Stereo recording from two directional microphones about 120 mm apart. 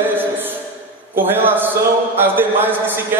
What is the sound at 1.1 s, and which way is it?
A man's voice, 15° right (ahead or behind).